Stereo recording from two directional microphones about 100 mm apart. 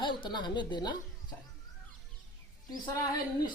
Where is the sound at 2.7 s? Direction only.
40° left (ahead or behind).